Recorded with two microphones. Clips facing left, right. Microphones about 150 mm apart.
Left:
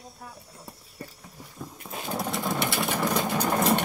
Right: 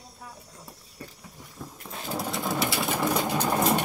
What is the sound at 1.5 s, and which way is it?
Sewing machine, centre (ahead or behind).